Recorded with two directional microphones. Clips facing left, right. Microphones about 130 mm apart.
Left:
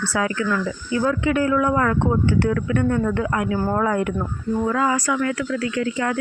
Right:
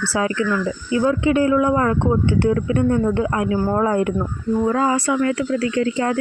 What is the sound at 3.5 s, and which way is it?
Speech, 10° right (ahead or behind).